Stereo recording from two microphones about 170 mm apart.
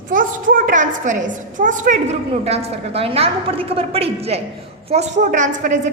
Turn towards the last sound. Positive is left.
turn(degrees=-45)  # may be behind; listen again after turning